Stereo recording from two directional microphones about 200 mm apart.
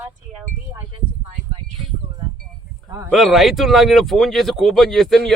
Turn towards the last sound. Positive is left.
turn(degrees=0)  # may be behind; listen again after turning